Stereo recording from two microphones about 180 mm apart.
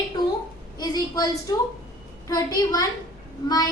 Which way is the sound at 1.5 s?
20° left (ahead or behind).